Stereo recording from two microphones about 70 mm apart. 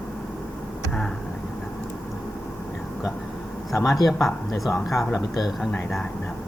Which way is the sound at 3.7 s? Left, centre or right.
Left.